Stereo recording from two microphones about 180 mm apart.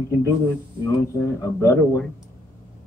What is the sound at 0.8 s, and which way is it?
Speech, 15° left (ahead or behind).